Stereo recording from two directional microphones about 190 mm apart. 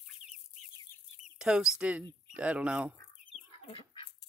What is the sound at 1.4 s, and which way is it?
Speech, 5° right (ahead or behind).